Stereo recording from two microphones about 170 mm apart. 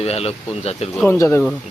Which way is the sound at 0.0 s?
35° left (ahead or behind).